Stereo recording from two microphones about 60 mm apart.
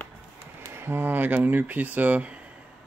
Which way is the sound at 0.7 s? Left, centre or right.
Right.